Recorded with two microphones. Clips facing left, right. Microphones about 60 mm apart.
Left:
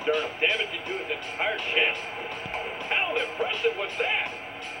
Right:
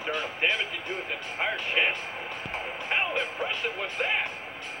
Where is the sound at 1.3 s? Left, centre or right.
Right.